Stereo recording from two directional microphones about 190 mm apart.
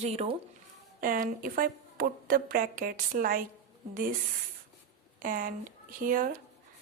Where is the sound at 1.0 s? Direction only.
45° right (ahead or behind).